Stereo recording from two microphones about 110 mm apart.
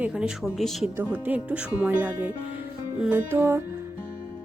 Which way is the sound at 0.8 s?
15° right (ahead or behind).